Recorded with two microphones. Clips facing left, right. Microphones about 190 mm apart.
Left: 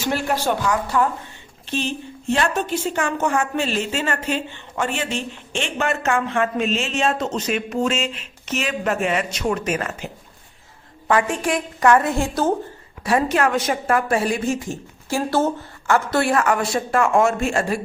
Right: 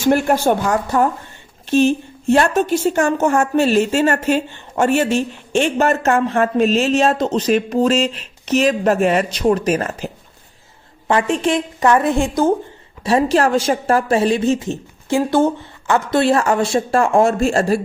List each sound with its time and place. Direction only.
0.0 s a woman's voice: 50° right (ahead or behind)
11.1 s a woman's voice: 25° right (ahead or behind)
13.0 s a woman's voice: 25° right (ahead or behind)